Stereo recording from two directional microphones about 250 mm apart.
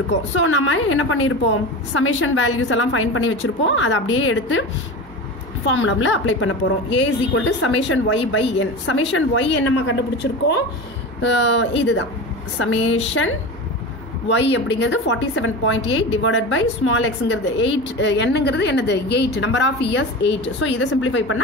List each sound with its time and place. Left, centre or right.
0.4 s a woman's voice: left
5.7 s a woman's voice: left